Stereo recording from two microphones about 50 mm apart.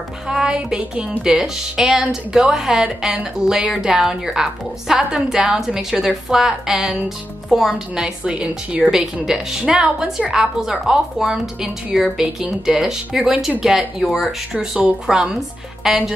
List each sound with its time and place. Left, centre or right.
0.3 s speech: centre
7.9 s a woman's voice: centre
8.9 s speech: centre